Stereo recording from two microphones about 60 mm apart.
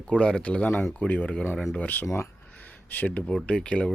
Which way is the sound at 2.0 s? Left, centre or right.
Left.